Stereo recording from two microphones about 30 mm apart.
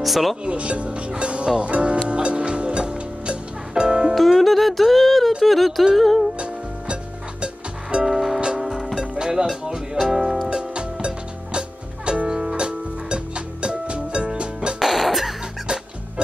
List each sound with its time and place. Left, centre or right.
0.0 s a sound: centre
0.5 s speech: right
2.0 s music: right
4.1 s music: centre
5.4 s a sound: centre
8.0 s music: centre
9.0 s music: right
9.9 s music: centre
10.5 s music: right
12.3 s music: right
14.8 s music: centre